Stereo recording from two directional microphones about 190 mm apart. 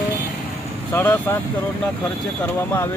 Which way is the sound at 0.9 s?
10° left (ahead or behind).